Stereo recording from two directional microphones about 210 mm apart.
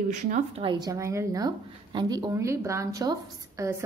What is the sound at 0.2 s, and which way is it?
A woman's voice, 30° right (ahead or behind).